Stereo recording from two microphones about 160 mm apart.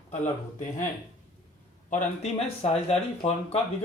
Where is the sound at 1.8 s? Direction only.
40° left (ahead or behind).